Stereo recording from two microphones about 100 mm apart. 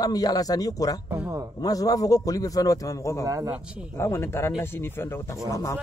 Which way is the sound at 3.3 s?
30° right (ahead or behind).